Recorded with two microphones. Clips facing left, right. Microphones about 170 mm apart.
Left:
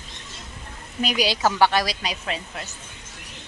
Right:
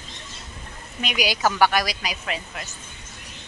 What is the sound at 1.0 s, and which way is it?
A woman's voice, 30° left (ahead or behind).